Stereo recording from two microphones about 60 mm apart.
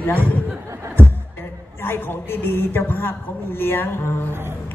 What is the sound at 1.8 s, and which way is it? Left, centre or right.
A woman's voice, left.